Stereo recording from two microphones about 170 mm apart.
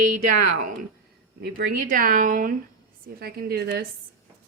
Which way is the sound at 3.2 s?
65° right (ahead or behind).